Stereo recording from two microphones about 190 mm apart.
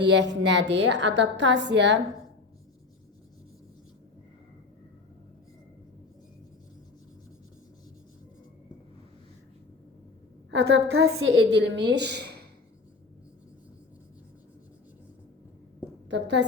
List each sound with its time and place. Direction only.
0.0 s a woman's voice: 70° right (ahead or behind)
10.5 s a woman's voice: 80° right
11.5 s speech: 65° right (ahead or behind)
16.0 s a woman's voice: 65° right (ahead or behind)